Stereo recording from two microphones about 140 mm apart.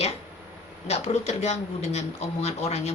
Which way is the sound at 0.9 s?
50° left (ahead or behind).